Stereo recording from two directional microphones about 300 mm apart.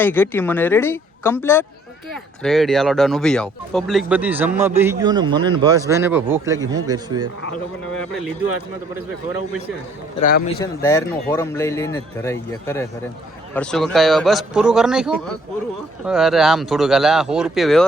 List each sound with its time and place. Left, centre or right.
0.0 s a man's voice: centre
10.2 s a man's voice: left
10.6 s a man's voice: centre